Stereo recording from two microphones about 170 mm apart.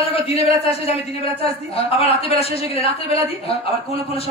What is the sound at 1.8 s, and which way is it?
Speech, 35° left (ahead or behind).